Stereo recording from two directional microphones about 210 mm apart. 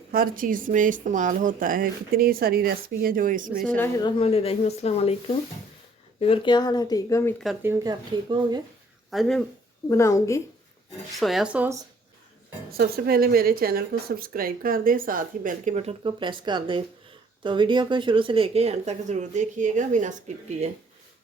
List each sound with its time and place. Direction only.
0.1 s speech: 40° right (ahead or behind)
4.0 s speech: 25° left (ahead or behind)
6.1 s speech: 25° left (ahead or behind)
7.6 s speech: 15° right (ahead or behind)
9.0 s speech: centre (ahead or behind)
9.9 s a woman's voice: 15° left (ahead or behind)
11.2 s speech: centre (ahead or behind)
12.7 s speech: 45° right (ahead or behind)